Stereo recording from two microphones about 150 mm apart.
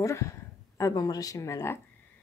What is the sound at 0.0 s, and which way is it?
Speech, 20° left (ahead or behind).